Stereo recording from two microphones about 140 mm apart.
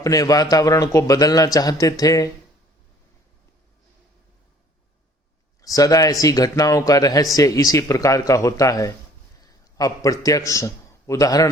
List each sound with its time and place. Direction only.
0.0 s a man's voice: 25° left (ahead or behind)
5.6 s a man's voice: 25° left (ahead or behind)